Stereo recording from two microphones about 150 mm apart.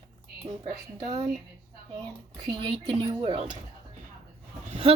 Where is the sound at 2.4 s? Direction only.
30° right (ahead or behind).